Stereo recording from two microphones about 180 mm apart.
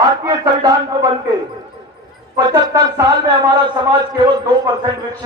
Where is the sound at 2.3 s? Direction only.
20° right (ahead or behind).